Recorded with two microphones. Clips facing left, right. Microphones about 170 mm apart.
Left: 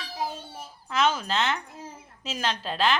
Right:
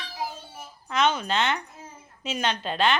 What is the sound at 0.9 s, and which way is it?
A woman's voice, 5° left (ahead or behind).